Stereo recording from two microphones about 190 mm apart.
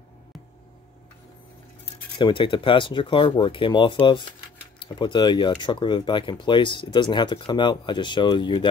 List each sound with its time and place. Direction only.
2.1 s speech: 25° left (ahead or behind)